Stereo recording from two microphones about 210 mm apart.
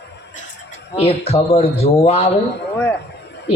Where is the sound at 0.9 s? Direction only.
30° left (ahead or behind).